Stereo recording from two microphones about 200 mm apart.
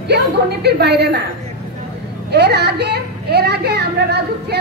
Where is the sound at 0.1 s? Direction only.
55° right (ahead or behind).